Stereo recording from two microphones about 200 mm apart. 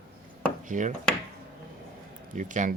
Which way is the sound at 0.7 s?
40° right (ahead or behind).